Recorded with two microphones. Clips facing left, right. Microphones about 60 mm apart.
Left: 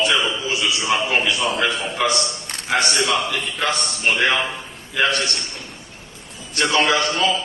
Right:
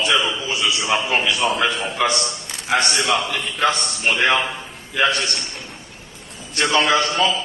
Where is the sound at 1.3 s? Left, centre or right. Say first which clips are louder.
Right 1 dB; right.